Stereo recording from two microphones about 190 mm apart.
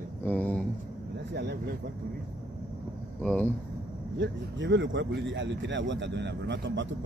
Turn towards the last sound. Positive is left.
turn(degrees=-70)  # may be behind; listen again after turning